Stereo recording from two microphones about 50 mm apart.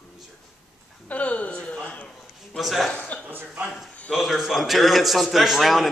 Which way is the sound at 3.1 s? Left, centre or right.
Left.